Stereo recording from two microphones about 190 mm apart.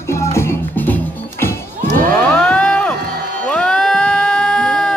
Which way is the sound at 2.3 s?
5° left (ahead or behind).